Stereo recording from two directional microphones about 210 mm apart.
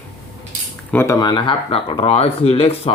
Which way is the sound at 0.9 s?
10° left (ahead or behind).